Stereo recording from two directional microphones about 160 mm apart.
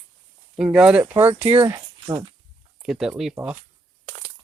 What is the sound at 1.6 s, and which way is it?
Speech, 25° right (ahead or behind).